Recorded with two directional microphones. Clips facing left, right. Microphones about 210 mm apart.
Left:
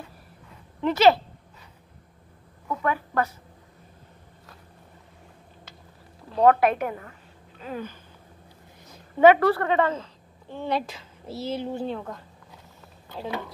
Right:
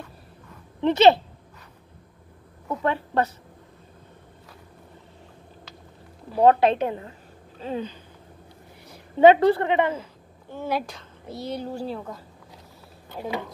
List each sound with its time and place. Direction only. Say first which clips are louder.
0.7 s speech: right 2 dB; 20° right (ahead or behind)
2.7 s a woman's voice: right 2 dB; 30° right (ahead or behind)
6.4 s a woman's voice: right 1 dB; 25° right (ahead or behind)
10.5 s speech: even; 5° right (ahead or behind)